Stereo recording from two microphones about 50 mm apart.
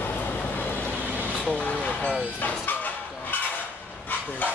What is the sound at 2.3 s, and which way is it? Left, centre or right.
Vehicle, left.